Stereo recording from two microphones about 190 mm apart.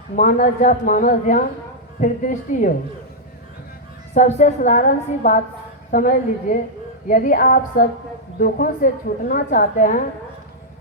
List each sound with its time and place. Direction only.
0.2 s a woman's voice: 40° left (ahead or behind)
4.1 s a woman's voice: 35° left (ahead or behind)